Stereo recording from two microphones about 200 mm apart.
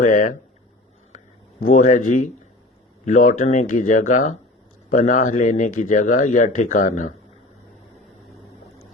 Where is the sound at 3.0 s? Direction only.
40° left (ahead or behind).